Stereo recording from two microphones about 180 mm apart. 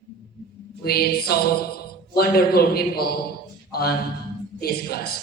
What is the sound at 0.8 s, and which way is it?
A woman's voice, 60° left (ahead or behind).